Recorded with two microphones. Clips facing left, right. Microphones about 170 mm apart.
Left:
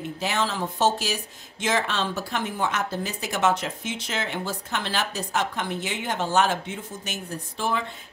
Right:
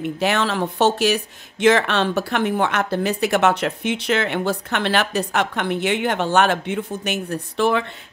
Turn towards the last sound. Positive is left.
turn(degrees=-70)  # may be behind; listen again after turning